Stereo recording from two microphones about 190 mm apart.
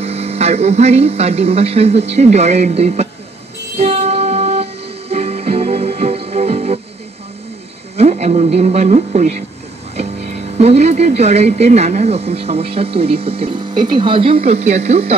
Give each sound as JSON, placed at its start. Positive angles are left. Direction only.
{"t": 0.0, "sound": "speech", "side_deg": -35}
{"t": 3.7, "sound": "music", "side_deg": -35}
{"t": 8.0, "sound": "radio", "side_deg": -35}
{"t": 8.5, "sound": "speech", "side_deg": -35}
{"t": 10.6, "sound": "speech", "side_deg": -35}